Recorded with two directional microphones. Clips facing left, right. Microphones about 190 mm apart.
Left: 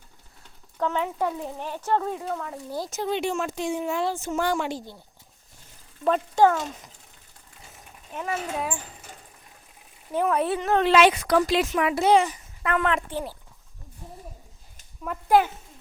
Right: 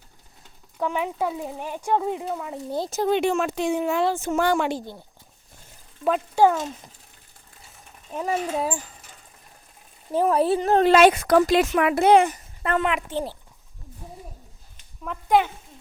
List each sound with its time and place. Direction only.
0.8 s a child's voice: 10° right (ahead or behind)
2.9 s speech: 45° right (ahead or behind)
6.1 s speech: 5° right (ahead or behind)
8.1 s speech: 35° right (ahead or behind)
10.1 s speech: 35° right (ahead or behind); by 11.6 s 50° right (ahead or behind)
11.6 s speech: 65° right (ahead or behind)
12.6 s a woman's voice: 30° right (ahead or behind)
15.0 s speech: 5° left (ahead or behind)